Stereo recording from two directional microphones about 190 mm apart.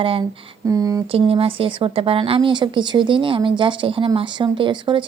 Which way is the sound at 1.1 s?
30° right (ahead or behind).